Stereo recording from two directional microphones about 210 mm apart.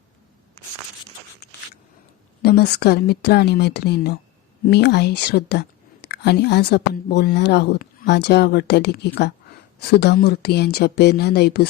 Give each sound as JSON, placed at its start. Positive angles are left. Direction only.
{"t": 2.4, "sound": "speech", "side_deg": 50}